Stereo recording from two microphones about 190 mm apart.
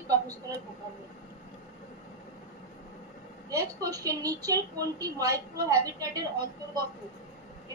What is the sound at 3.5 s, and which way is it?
A woman's voice, 20° right (ahead or behind).